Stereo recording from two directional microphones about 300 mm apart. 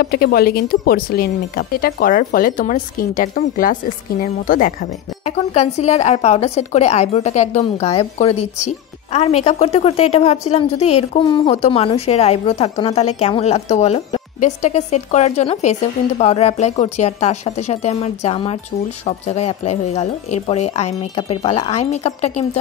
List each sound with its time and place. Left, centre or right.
0.0 s speech: left
9.4 s speech: left